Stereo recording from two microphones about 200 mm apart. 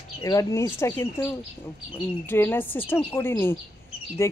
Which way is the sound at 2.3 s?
10° left (ahead or behind).